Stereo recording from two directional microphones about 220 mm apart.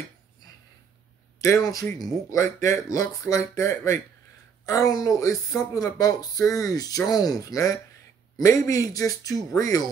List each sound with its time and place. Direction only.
1.4 s speech: 15° left (ahead or behind)